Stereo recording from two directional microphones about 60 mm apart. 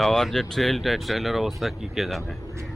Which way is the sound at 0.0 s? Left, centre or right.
Centre.